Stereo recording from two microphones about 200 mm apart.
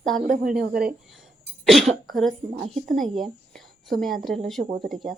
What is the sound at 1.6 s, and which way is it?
A woman's voice, centre (ahead or behind).